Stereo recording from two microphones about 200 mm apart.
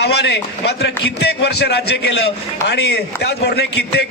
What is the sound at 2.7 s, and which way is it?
Speech, 55° left (ahead or behind).